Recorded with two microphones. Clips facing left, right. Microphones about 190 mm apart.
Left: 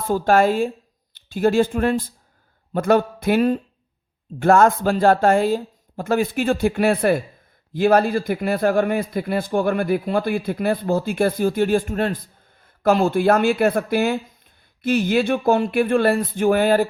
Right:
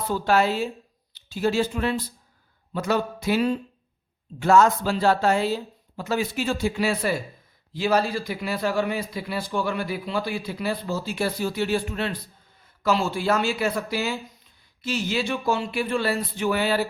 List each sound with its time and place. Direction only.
0.1 s a man's voice: 50° left (ahead or behind)